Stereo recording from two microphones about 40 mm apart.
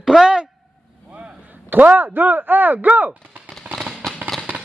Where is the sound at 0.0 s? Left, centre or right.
Centre.